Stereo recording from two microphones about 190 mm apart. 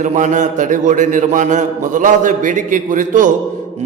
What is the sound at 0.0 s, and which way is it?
A man's voice, 40° right (ahead or behind).